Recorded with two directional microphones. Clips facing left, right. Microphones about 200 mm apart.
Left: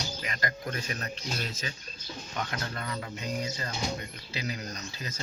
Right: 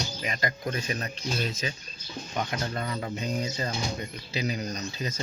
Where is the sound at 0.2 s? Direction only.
20° right (ahead or behind).